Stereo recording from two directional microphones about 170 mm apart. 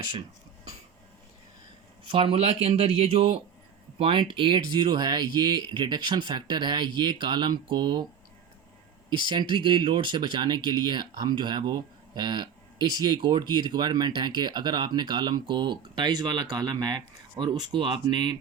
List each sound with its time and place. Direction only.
2.0 s speech: 35° right (ahead or behind)
9.0 s speech: 25° right (ahead or behind)